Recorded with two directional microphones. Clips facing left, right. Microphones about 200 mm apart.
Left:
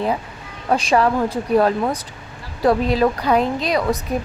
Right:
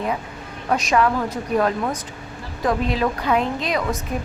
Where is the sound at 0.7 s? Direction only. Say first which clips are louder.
Left 2 dB; 30° left (ahead or behind).